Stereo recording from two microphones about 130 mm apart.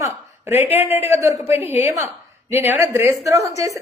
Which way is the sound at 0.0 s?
20° right (ahead or behind).